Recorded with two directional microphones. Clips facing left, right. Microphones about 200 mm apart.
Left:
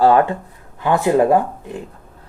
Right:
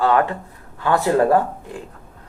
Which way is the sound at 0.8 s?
20° left (ahead or behind).